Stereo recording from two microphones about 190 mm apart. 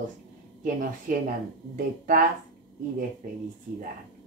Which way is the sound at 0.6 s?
45° right (ahead or behind).